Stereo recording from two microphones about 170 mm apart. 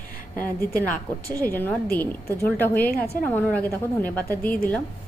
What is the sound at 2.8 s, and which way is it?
Speech, 65° left (ahead or behind).